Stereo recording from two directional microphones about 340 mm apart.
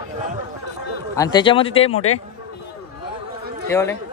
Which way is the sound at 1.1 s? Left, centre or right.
Centre.